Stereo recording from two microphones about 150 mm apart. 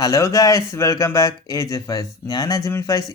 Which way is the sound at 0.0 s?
20° left (ahead or behind).